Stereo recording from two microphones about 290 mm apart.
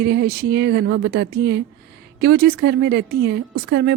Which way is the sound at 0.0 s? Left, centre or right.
Right.